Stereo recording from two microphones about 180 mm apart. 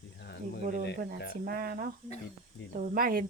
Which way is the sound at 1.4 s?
55° right (ahead or behind).